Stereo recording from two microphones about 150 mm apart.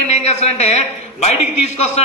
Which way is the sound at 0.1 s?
45° left (ahead or behind).